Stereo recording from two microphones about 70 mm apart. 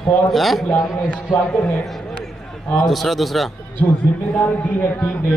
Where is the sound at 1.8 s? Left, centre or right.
Centre.